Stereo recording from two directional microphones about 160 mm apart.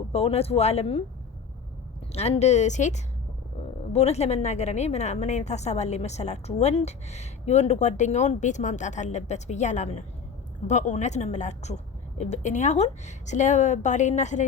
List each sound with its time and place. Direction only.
0.1 s speech: 40° left (ahead or behind)
2.1 s a woman's voice: 40° left (ahead or behind)